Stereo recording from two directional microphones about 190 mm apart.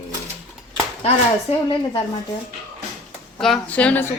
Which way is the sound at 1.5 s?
30° left (ahead or behind).